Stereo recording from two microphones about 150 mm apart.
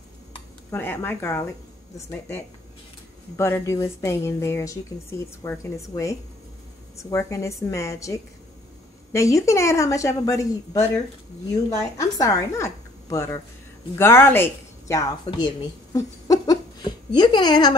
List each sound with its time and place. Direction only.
0.7 s a woman's voice: 15° left (ahead or behind)
12.0 s a woman's voice: 20° left (ahead or behind)